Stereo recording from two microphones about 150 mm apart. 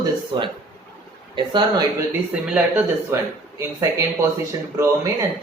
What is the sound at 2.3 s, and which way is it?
Speech, 10° right (ahead or behind).